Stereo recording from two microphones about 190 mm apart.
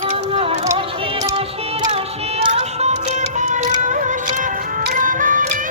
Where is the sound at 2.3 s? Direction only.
30° right (ahead or behind).